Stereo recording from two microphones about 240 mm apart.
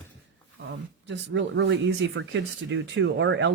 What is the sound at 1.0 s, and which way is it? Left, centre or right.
Speech, right.